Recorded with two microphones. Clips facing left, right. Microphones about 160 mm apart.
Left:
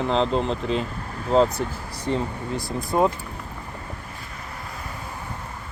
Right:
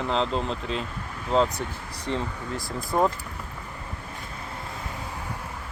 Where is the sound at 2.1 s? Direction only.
40° left (ahead or behind).